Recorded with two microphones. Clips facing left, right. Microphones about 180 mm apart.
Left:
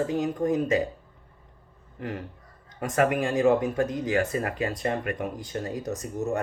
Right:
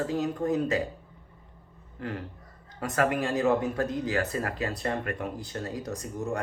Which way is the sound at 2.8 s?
20° left (ahead or behind).